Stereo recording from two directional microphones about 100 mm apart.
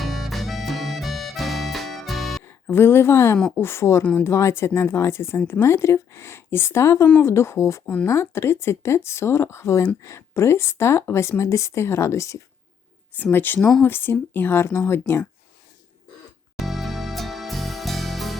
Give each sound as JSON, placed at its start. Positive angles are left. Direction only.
{"t": 0.0, "sound": "music", "side_deg": 0}
{"t": 2.4, "sound": "a woman's voice", "side_deg": 25}
{"t": 13.3, "sound": "speech", "side_deg": 20}
{"t": 13.6, "sound": "speech", "side_deg": 5}
{"t": 13.8, "sound": "speech", "side_deg": 20}
{"t": 16.6, "sound": "music", "side_deg": 0}